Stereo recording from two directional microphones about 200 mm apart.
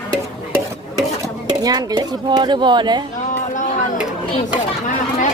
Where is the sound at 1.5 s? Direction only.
20° right (ahead or behind).